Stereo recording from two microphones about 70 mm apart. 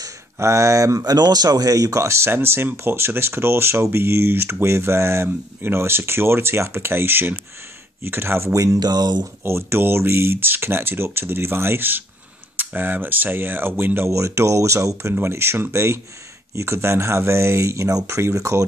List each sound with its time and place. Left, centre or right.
0.4 s speech: right
1.1 s speech: right
8.7 s speech: right
9.4 s speech: right